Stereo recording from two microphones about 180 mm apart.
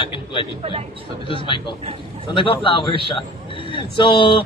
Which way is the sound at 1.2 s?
30° left (ahead or behind).